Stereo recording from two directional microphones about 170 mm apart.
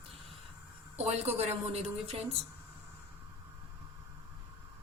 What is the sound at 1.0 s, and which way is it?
A woman's voice, 40° right (ahead or behind).